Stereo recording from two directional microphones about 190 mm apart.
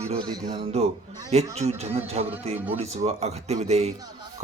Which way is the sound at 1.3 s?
35° right (ahead or behind).